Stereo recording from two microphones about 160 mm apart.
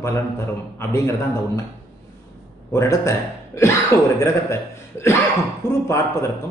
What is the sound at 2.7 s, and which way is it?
Speech, 20° left (ahead or behind).